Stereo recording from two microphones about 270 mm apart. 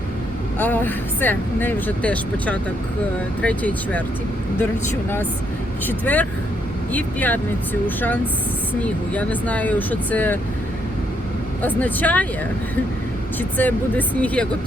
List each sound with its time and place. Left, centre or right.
0.6 s speech: centre
5.8 s speech: centre
11.6 s speech: centre
13.6 s speech: centre